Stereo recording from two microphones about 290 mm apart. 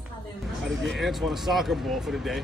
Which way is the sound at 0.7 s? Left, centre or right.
Centre.